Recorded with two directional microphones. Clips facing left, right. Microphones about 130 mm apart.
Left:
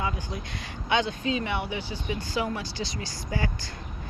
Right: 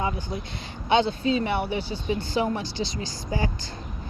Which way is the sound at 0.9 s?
30° right (ahead or behind).